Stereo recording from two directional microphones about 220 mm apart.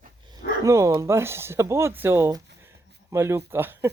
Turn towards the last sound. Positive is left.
turn(degrees=-10)  # may be behind; listen again after turning